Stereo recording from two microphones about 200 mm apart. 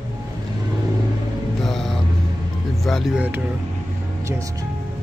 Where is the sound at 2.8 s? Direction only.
Centre (ahead or behind).